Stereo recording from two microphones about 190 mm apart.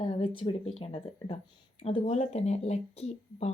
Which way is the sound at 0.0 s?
30° left (ahead or behind).